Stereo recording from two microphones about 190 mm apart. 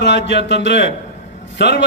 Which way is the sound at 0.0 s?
65° left (ahead or behind).